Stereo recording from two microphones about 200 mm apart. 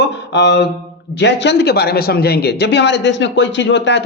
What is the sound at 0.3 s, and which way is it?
A man's voice, 60° left (ahead or behind).